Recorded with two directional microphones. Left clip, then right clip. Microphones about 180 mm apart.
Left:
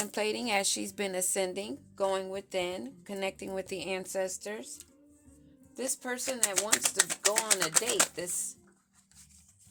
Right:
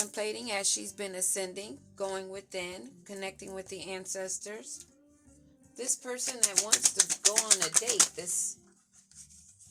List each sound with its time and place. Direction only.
0.0 s speech: 40° left (ahead or behind)
6.6 s speech: 15° left (ahead or behind)
8.1 s speech: 40° left (ahead or behind)